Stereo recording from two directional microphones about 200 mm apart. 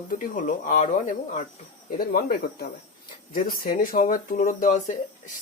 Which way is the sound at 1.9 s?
50° left (ahead or behind).